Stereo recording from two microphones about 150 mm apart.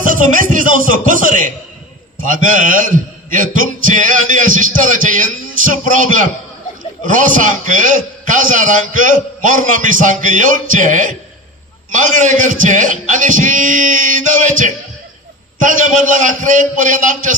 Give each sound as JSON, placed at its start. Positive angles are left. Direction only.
{"t": 0.0, "sound": "speech", "side_deg": -60}